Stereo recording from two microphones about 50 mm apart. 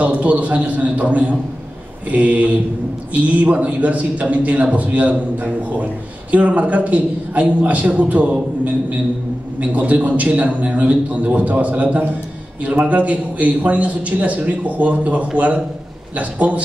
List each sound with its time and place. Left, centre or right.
0.0 s a man's voice: right